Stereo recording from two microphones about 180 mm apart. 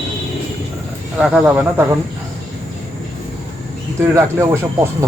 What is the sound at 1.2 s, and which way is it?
Speech, 5° right (ahead or behind).